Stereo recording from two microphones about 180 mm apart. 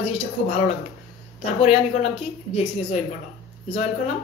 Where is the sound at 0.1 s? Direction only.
35° left (ahead or behind).